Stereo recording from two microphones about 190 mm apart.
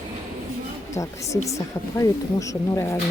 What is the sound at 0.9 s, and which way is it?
Speech, 15° left (ahead or behind).